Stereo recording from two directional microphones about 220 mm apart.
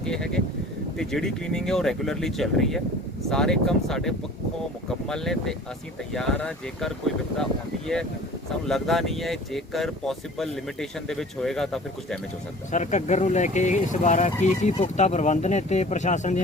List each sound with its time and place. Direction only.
0.0 s speech: 5° left (ahead or behind)
8.6 s speech: centre (ahead or behind)
12.7 s speech: 30° left (ahead or behind)